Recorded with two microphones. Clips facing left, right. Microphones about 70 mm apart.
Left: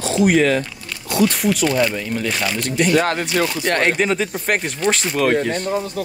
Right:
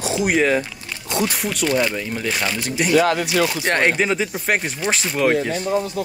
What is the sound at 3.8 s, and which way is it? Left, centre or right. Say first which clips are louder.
Speech: left 1 dB; centre.